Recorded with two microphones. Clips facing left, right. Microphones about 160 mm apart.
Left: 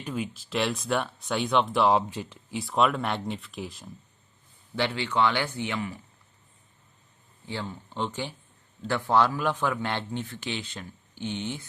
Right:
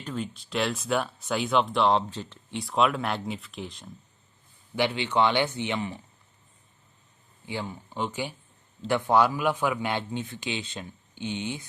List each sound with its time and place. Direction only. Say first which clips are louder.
0.0 s speech: left 1 dB; 10° left (ahead or behind)
4.7 s a man's voice: right 2 dB; 15° right (ahead or behind)
7.4 s a man's voice: right 1 dB; 15° right (ahead or behind)